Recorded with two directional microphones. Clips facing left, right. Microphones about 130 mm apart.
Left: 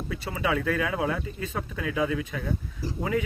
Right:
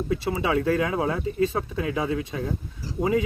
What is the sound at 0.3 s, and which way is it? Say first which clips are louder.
Speech: right 2 dB; 30° right (ahead or behind).